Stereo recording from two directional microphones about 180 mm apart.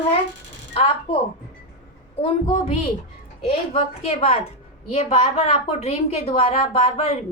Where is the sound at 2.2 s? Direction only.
35° left (ahead or behind).